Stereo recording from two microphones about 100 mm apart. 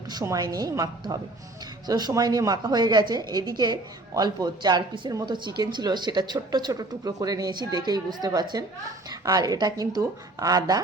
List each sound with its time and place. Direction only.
0.1 s speech: 40° right (ahead or behind)